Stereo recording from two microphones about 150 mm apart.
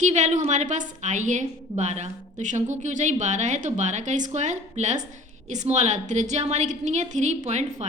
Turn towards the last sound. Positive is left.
turn(degrees=-50)  # may be behind; listen again after turning